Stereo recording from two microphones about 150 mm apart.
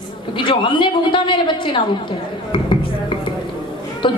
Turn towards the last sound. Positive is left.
turn(degrees=35)  # may be behind; listen again after turning